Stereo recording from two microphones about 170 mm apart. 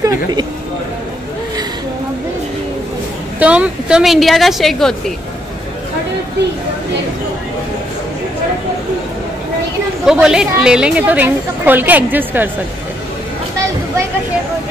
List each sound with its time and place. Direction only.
0.0 s speech: 20° right (ahead or behind)
3.3 s a woman's voice: 5° right (ahead or behind)
10.0 s a woman's voice: 5° right (ahead or behind)